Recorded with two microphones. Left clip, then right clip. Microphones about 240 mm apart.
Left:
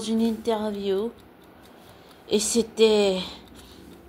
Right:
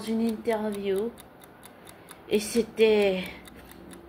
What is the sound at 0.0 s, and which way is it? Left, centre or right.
Speech, left.